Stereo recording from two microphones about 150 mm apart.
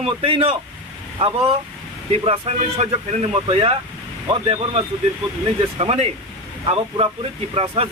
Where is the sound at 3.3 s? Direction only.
35° right (ahead or behind).